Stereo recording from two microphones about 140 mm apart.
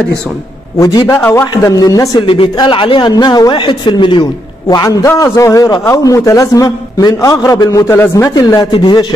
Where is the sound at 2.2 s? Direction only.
40° left (ahead or behind).